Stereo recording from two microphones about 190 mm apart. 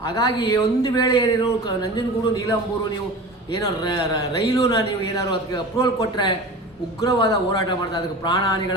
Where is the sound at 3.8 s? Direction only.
20° left (ahead or behind).